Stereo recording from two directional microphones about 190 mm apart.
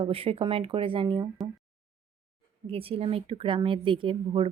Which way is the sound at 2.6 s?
30° right (ahead or behind).